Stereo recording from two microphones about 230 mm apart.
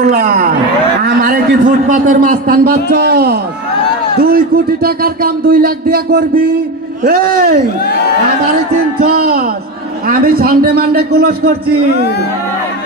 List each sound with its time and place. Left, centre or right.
0.0 s speech: right
1.0 s a man's voice: right
10.0 s a man's voice: right